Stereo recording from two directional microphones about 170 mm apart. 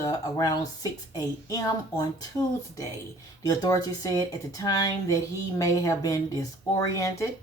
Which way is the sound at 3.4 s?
20° left (ahead or behind).